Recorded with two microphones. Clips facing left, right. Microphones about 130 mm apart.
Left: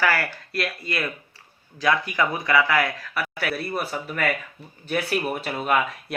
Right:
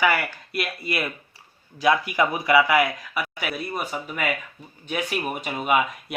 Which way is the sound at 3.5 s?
Centre (ahead or behind).